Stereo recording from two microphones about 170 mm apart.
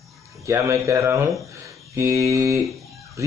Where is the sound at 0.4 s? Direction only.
15° right (ahead or behind).